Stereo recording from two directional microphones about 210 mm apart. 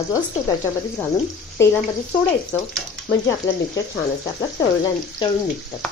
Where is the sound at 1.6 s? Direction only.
10° left (ahead or behind).